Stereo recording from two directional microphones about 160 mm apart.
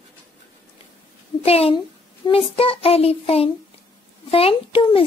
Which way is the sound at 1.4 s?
40° left (ahead or behind).